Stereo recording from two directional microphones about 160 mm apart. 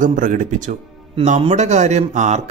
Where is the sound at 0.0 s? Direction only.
55° right (ahead or behind).